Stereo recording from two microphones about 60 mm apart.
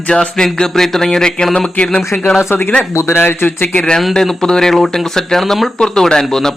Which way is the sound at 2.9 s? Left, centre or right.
Left.